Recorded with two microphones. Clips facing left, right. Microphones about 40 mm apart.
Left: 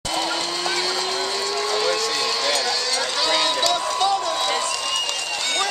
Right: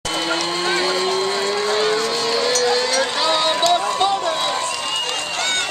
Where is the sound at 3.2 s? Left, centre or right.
Centre.